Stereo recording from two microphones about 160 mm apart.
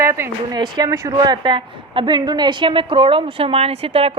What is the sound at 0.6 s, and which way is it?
A woman's voice, 30° right (ahead or behind).